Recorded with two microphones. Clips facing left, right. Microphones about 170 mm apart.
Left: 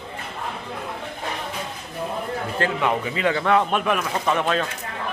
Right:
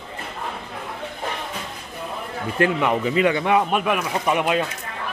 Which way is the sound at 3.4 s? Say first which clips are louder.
Even; 15° right (ahead or behind).